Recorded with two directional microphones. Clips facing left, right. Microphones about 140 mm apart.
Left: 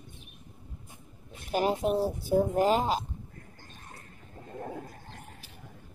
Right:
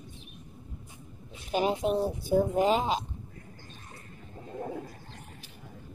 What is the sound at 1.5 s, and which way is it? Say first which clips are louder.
Speech: even; 5° left (ahead or behind).